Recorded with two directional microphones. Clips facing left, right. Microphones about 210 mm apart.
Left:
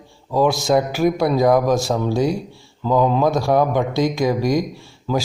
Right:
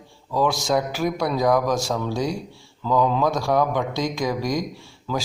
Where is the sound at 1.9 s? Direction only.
35° left (ahead or behind).